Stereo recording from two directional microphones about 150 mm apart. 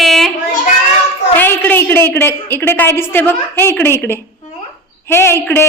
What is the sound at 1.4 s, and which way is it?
A woman's voice, 10° left (ahead or behind).